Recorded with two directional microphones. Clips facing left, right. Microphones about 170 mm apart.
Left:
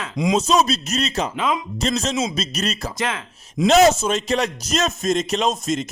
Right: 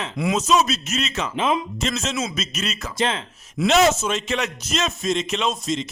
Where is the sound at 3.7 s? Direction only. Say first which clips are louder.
Left 3 dB; 40° left (ahead or behind).